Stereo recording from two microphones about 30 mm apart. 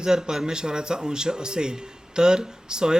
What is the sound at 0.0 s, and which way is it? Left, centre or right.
A man's voice, right.